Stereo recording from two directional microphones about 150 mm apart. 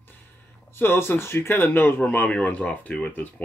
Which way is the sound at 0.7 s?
15° left (ahead or behind).